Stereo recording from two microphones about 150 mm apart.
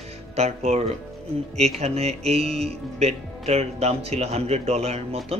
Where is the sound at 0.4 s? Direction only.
45° right (ahead or behind).